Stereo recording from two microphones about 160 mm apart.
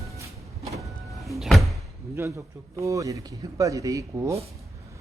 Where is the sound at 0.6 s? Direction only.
Centre (ahead or behind).